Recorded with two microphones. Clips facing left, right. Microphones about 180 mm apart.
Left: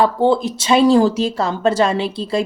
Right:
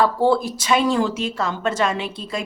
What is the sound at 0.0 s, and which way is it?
Speech, 20° left (ahead or behind).